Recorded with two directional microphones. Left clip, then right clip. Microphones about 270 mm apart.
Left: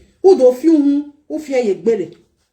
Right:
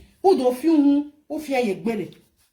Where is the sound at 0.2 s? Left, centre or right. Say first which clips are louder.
Left 8 dB; centre.